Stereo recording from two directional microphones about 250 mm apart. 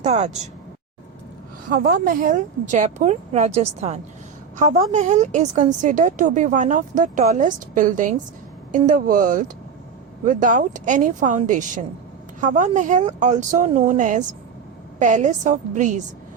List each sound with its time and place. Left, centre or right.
0.0 s speech: right
1.7 s speech: right